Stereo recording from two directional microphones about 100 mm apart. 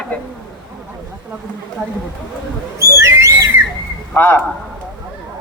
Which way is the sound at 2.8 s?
30° right (ahead or behind).